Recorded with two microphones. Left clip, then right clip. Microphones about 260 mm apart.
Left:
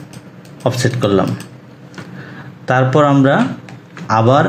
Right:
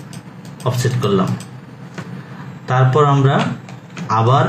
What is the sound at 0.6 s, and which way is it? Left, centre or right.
Speech, left.